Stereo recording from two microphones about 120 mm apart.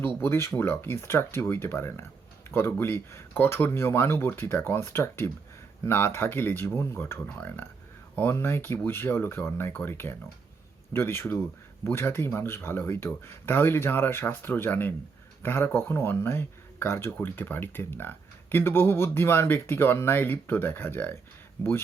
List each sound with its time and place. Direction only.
0.2 s speech: 20° left (ahead or behind)